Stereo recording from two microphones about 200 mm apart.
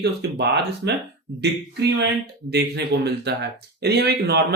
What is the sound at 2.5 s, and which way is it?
Speech, 55° right (ahead or behind).